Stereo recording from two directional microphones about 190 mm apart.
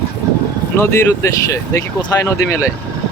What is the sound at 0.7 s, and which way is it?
Speech, 15° left (ahead or behind).